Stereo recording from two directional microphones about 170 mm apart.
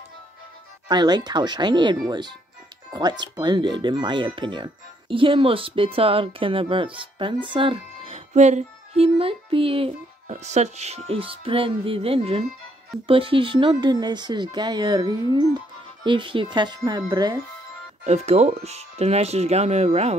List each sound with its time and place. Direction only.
0.8 s speech: 25° right (ahead or behind)
18.0 s speech: 40° right (ahead or behind)